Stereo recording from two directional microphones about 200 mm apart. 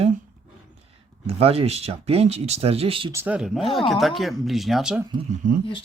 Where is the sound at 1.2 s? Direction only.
30° right (ahead or behind).